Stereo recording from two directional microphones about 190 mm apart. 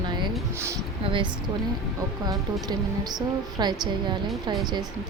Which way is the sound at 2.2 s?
20° right (ahead or behind).